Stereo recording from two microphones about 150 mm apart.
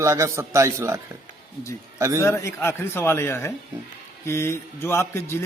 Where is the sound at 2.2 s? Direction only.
20° left (ahead or behind).